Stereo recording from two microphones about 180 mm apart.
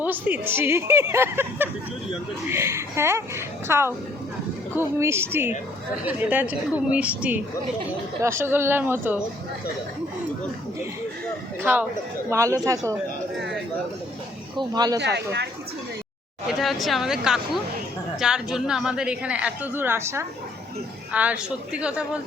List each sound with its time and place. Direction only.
0.0 s a woman's voice: 10° right (ahead or behind)
11.6 s a woman's voice: 10° right (ahead or behind)
14.5 s speech: 20° right (ahead or behind)
14.9 s speech: 70° right (ahead or behind)
16.5 s a woman's voice: centre (ahead or behind)